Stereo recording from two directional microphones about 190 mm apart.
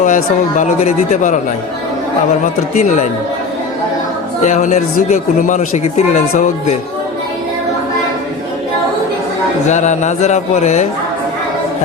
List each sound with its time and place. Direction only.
0.0 s speech: 40° left (ahead or behind)
2.4 s speech: 40° left (ahead or behind)
4.4 s speech: 40° left (ahead or behind)
9.6 s speech: 40° left (ahead or behind)